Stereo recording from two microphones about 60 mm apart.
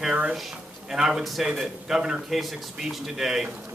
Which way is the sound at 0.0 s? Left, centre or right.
Centre.